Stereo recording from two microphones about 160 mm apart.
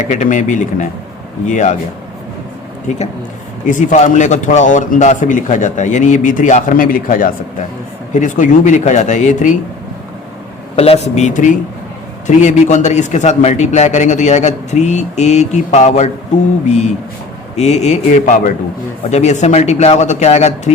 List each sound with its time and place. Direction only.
0.0 s a man's voice: 50° left (ahead or behind)
3.7 s a man's voice: 50° left (ahead or behind)
10.8 s a man's voice: 40° left (ahead or behind)